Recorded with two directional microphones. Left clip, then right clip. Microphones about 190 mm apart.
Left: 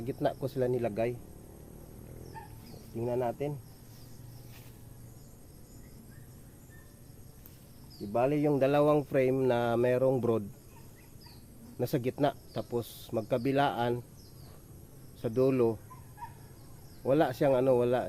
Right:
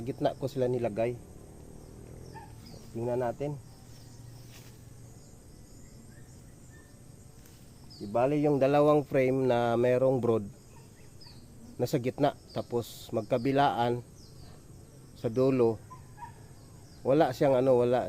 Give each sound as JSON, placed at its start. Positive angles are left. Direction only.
{"t": 0.0, "sound": "speech", "side_deg": -15}
{"t": 2.9, "sound": "speech", "side_deg": -15}
{"t": 8.1, "sound": "speech", "side_deg": -10}
{"t": 11.8, "sound": "speech", "side_deg": -20}
{"t": 15.2, "sound": "speech", "side_deg": -20}
{"t": 16.2, "sound": "bird", "side_deg": 65}
{"t": 17.0, "sound": "speech", "side_deg": -20}